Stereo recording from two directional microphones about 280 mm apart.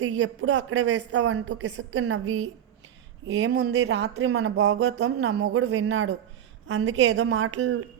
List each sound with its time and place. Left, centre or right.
0.0 s speech: right